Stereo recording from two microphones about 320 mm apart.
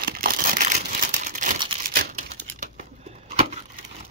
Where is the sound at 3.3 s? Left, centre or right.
Centre.